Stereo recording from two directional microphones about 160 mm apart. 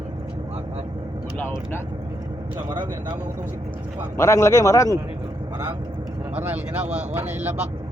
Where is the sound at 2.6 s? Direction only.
30° right (ahead or behind).